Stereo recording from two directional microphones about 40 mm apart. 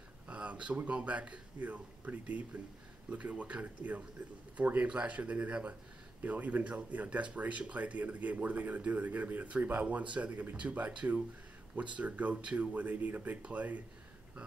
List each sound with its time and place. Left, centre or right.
0.3 s a sound: right
0.8 s speech: right
6.2 s speech: right